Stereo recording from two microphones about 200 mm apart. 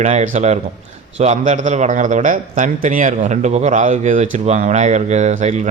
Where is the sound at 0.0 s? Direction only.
35° right (ahead or behind).